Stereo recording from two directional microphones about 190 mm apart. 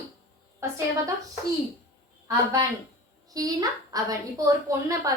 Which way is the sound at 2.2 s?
15° right (ahead or behind).